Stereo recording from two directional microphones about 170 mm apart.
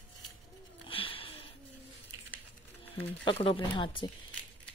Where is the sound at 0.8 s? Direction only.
30° left (ahead or behind).